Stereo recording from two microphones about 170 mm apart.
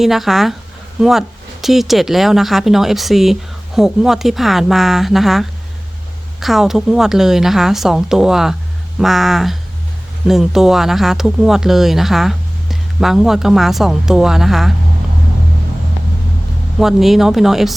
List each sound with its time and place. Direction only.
0.0 s a woman's voice: centre (ahead or behind)
16.8 s a woman's voice: centre (ahead or behind)